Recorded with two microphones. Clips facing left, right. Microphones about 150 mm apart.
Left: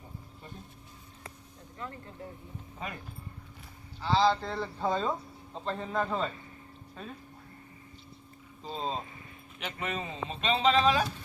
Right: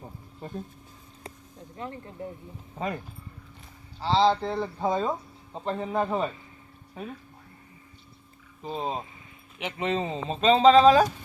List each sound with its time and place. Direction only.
0.4 s speech: 40° right (ahead or behind)
1.8 s speech: 20° right (ahead or behind)
2.7 s speech: 40° right (ahead or behind)
4.0 s a man's voice: 25° right (ahead or behind)
8.6 s a man's voice: 15° right (ahead or behind); by 11.1 s 40° right (ahead or behind)